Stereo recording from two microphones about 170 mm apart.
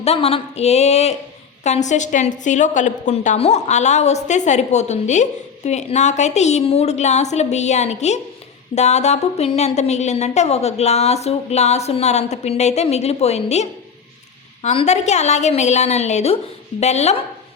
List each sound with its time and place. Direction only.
0.0 s a woman's voice: 35° left (ahead or behind)